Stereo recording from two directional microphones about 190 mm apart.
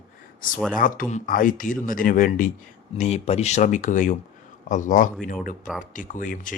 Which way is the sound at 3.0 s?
35° left (ahead or behind).